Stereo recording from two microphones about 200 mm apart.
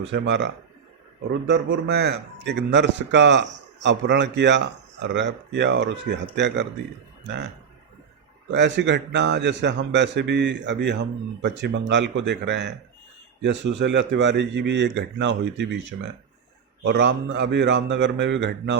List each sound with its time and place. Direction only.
0.1 s a man's voice: 60° right (ahead or behind)
8.4 s a man's voice: 60° right (ahead or behind)